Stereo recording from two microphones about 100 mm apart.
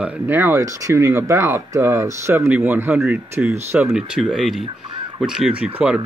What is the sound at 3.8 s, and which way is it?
Speech, 5° right (ahead or behind).